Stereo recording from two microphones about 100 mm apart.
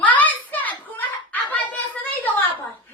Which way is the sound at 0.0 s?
15° left (ahead or behind).